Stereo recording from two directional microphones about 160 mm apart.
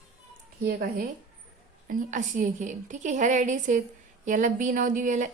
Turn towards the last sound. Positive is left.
turn(degrees=-55)  # may be behind; listen again after turning